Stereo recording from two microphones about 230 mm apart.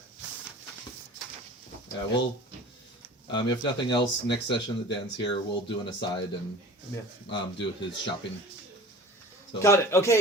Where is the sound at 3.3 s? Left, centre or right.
Centre.